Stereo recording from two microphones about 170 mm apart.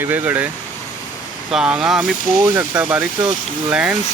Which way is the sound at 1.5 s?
5° right (ahead or behind).